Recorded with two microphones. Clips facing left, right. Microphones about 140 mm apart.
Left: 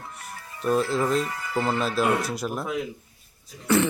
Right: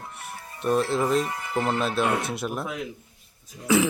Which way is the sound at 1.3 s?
20° right (ahead or behind).